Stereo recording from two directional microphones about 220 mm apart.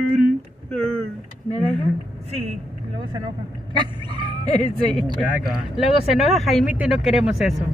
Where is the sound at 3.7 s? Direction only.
20° right (ahead or behind).